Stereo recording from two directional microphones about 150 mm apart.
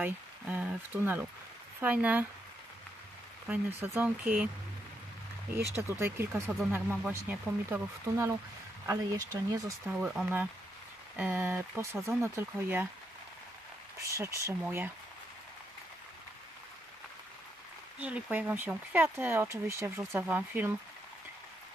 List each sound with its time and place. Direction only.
0.0 s speech: 10° right (ahead or behind)
3.4 s speech: 10° right (ahead or behind)
5.5 s speech: 15° right (ahead or behind)
9.8 s speech: 5° right (ahead or behind)
13.9 s speech: 20° right (ahead or behind)
18.0 s speech: 10° right (ahead or behind)